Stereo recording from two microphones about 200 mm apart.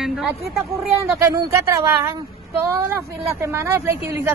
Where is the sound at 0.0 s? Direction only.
Centre (ahead or behind).